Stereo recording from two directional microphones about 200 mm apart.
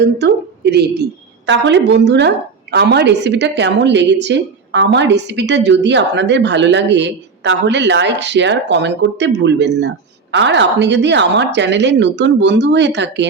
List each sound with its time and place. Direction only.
0.0 s a woman's voice: 55° right (ahead or behind)